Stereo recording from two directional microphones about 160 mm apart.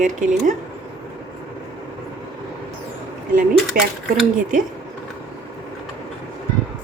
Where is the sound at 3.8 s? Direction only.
65° right (ahead or behind).